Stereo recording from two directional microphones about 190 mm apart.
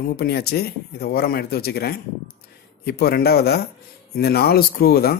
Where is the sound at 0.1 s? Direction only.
55° left (ahead or behind).